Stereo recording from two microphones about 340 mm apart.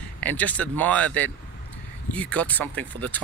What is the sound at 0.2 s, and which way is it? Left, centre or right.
Speech, centre.